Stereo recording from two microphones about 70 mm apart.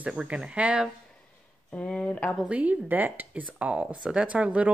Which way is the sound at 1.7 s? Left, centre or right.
Centre.